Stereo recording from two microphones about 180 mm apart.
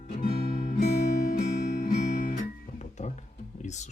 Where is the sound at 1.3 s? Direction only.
45° left (ahead or behind).